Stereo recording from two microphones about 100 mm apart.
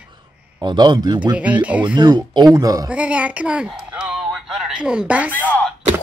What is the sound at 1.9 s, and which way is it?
Speech, 45° right (ahead or behind).